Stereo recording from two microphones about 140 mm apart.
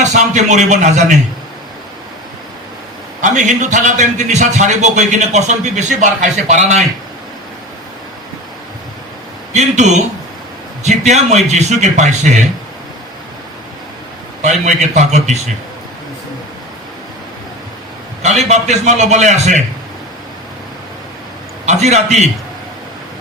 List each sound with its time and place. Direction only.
0.0 s a man's voice: 60° right (ahead or behind)
3.2 s a man's voice: 60° right (ahead or behind)
9.5 s a man's voice: 55° right (ahead or behind)
14.4 s a man's voice: 60° right (ahead or behind)
18.2 s a man's voice: 55° right (ahead or behind)
21.7 s a man's voice: 55° right (ahead or behind)